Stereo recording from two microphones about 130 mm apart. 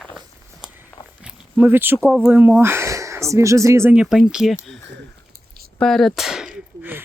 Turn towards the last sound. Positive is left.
turn(degrees=-5)  # may be behind; listen again after turning